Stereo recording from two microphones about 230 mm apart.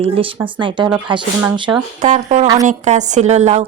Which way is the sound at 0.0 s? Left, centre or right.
Right.